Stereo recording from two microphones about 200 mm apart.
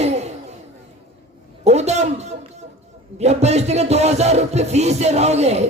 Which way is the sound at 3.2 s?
35° right (ahead or behind).